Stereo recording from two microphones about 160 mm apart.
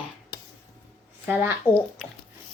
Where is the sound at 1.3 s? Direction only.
15° right (ahead or behind).